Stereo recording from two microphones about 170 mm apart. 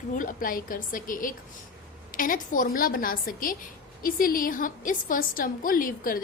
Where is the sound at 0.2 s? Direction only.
55° left (ahead or behind).